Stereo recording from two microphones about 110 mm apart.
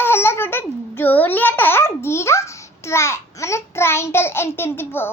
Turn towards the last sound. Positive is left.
turn(degrees=20)  # may be behind; listen again after turning